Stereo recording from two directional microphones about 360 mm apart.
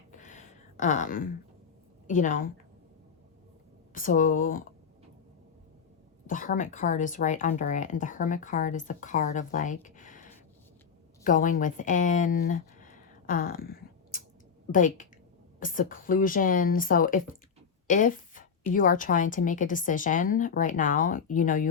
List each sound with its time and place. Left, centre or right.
0.2 s a sound: left
2.0 s speech: left
3.9 s speech: left
6.2 s speech: left
17.8 s a sound: left
18.7 s speech: left